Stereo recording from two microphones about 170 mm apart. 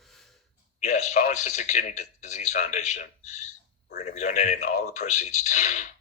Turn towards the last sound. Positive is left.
turn(degrees=45)  # may be behind; listen again after turning